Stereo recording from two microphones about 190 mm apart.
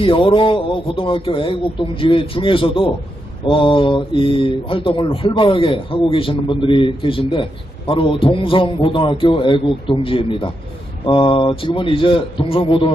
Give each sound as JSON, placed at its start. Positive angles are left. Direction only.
{"t": 0.0, "sound": "speech", "side_deg": 25}